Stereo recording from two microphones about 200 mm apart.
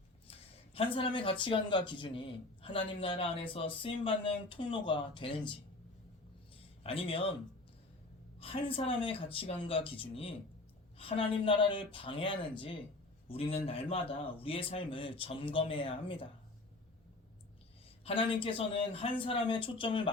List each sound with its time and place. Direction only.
0.3 s a sound: 30° left (ahead or behind)
0.9 s a man's voice: 25° left (ahead or behind)
6.8 s a man's voice: 25° left (ahead or behind)
8.4 s a man's voice: 30° left (ahead or behind)
18.0 s a man's voice: 25° left (ahead or behind)